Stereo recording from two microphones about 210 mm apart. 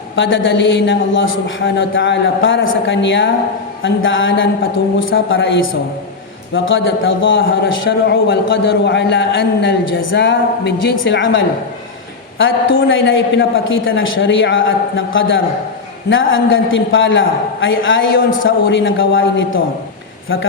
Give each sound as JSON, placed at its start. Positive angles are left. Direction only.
{"t": 0.2, "sound": "a man's voice", "side_deg": 60}